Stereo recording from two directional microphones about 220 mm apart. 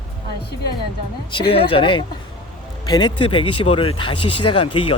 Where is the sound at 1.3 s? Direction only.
25° left (ahead or behind).